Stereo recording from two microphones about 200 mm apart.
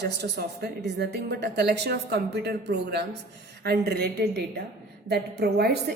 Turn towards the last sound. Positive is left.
turn(degrees=-55)  # may be behind; listen again after turning